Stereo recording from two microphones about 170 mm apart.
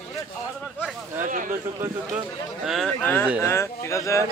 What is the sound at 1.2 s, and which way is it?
Speech, 50° right (ahead or behind).